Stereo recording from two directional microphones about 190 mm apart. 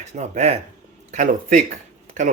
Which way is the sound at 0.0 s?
35° right (ahead or behind).